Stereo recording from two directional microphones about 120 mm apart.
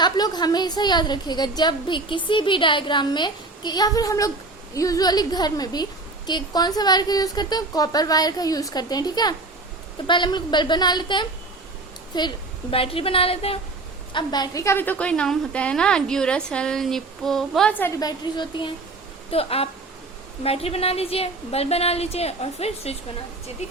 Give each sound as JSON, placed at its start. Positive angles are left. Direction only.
{"t": 0.0, "sound": "a woman's voice", "side_deg": 35}
{"t": 12.7, "sound": "speech", "side_deg": 50}
{"t": 14.1, "sound": "a woman's voice", "side_deg": 40}
{"t": 18.0, "sound": "a woman's voice", "side_deg": 40}
{"t": 19.3, "sound": "a woman's voice", "side_deg": 55}